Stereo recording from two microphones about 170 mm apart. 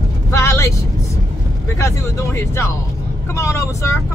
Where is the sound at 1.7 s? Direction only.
15° left (ahead or behind).